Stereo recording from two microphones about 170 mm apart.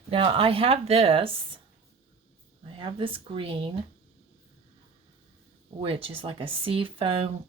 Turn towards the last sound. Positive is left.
turn(degrees=-30)  # may be behind; listen again after turning